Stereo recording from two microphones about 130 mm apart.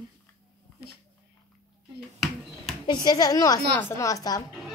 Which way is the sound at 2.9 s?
35° left (ahead or behind).